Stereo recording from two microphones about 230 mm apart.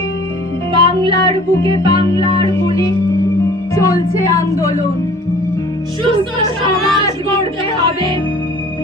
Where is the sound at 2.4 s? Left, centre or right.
Centre.